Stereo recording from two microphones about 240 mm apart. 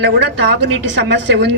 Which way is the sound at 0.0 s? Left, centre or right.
Right.